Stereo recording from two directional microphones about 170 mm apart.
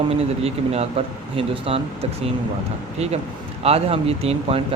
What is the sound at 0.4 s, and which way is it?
Speech, 35° right (ahead or behind).